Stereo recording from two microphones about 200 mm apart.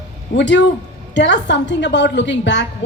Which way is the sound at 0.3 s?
65° left (ahead or behind).